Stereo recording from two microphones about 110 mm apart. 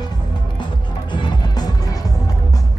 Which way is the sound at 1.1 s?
40° left (ahead or behind).